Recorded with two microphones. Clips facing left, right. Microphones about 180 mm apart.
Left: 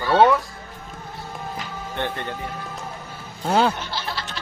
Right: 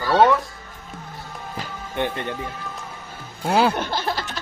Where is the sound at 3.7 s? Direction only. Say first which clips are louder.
Right 4 dB; 50° right (ahead or behind).